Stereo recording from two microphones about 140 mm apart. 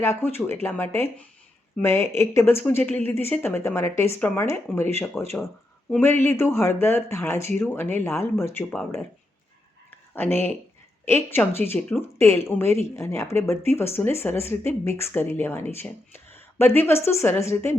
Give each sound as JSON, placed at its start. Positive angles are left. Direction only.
{"t": 0.0, "sound": "speech", "side_deg": 15}
{"t": 9.9, "sound": "a sound", "side_deg": 15}
{"t": 11.0, "sound": "speech", "side_deg": 15}